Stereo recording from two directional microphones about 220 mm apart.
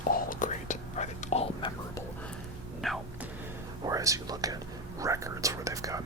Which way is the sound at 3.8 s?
15° right (ahead or behind).